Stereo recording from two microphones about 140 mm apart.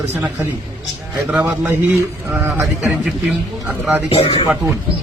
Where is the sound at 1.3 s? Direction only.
10° right (ahead or behind).